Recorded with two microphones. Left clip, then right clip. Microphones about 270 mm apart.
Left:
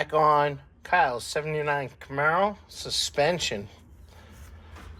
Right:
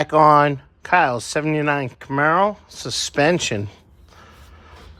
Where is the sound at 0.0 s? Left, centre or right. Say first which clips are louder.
Right 8 dB; right.